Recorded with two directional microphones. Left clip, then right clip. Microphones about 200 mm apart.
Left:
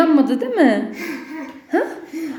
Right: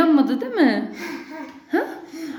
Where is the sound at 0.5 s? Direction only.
15° right (ahead or behind).